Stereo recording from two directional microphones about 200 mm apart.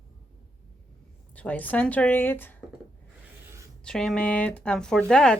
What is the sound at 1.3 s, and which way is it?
A woman's voice, 5° left (ahead or behind).